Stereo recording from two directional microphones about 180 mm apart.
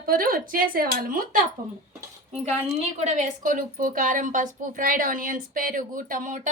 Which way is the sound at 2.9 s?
40° right (ahead or behind).